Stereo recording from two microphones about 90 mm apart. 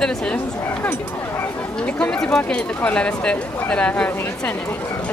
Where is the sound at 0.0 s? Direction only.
10° left (ahead or behind).